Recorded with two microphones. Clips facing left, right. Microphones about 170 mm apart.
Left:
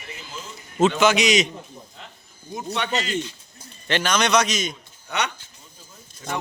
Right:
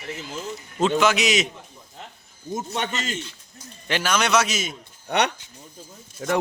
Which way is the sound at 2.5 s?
45° right (ahead or behind).